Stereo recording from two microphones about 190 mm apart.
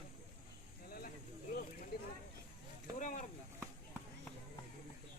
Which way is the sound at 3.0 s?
45° left (ahead or behind).